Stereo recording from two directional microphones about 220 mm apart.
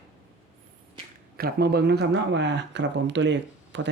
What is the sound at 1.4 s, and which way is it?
Speech, 45° right (ahead or behind).